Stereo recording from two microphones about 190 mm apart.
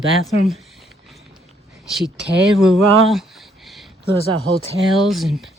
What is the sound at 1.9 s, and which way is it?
Speech, centre (ahead or behind).